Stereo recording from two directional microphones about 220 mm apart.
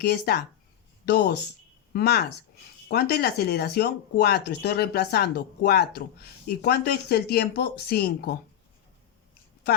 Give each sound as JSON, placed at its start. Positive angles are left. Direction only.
{"t": 0.0, "sound": "speech", "side_deg": 45}